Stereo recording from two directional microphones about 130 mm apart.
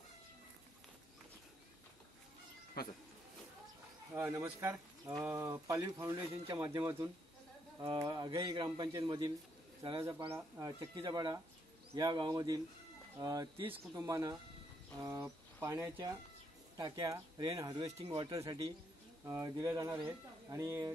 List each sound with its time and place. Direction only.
4.1 s speech: 20° right (ahead or behind)
5.5 s a man's voice: 25° right (ahead or behind)
7.8 s a man's voice: 35° right (ahead or behind)
10.3 s a man's voice: 25° right (ahead or behind)
17.8 s speech: 50° right (ahead or behind)
18.1 s a man's voice: 35° right (ahead or behind)
19.2 s speech: 25° right (ahead or behind)